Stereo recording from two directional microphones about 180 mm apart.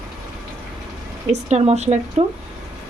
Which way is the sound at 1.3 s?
35° right (ahead or behind).